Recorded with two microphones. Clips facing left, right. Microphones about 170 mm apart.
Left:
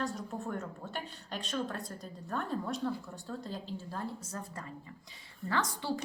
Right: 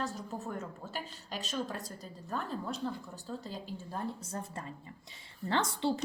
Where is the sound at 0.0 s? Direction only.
Centre (ahead or behind).